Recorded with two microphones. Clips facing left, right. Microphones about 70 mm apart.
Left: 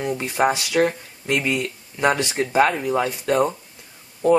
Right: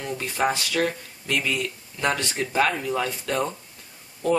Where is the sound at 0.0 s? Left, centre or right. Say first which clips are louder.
Left 5 dB; centre.